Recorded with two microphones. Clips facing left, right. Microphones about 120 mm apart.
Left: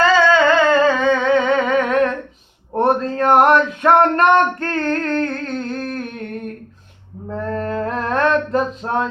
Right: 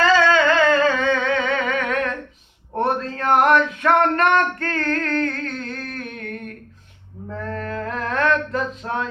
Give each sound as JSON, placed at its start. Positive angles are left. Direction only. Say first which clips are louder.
{"t": 0.4, "sound": "humming", "louder": "left 3 dB", "side_deg": 30}
{"t": 2.7, "sound": "a sound", "louder": "left 5 dB", "side_deg": 35}
{"t": 7.3, "sound": "mantra", "louder": "left 6 dB", "side_deg": 35}
{"t": 8.5, "sound": "music", "louder": "left 5 dB", "side_deg": 40}